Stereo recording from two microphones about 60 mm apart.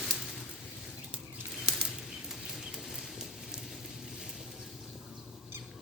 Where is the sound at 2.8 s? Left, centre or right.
Centre.